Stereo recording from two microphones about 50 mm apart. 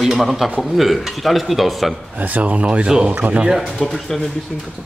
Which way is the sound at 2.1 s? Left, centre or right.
Right.